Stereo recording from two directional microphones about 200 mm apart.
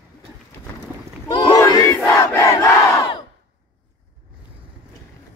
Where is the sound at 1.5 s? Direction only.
15° left (ahead or behind).